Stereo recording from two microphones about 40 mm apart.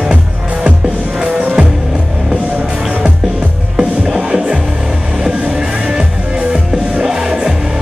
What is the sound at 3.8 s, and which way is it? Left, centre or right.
Music, centre.